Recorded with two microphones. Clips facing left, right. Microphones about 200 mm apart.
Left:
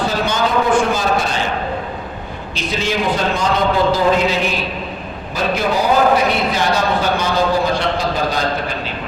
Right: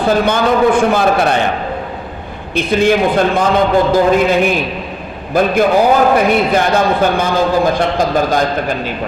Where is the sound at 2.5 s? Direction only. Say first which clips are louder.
Right 9 dB; 55° right (ahead or behind).